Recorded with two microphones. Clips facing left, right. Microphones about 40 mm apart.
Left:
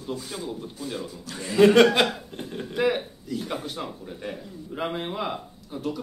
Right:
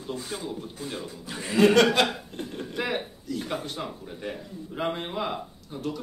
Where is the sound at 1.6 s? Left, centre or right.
Centre.